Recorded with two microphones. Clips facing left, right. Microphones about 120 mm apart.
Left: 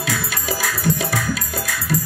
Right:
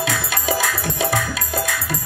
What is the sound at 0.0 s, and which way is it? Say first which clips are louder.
Music: right 2 dB; 20° right (ahead or behind).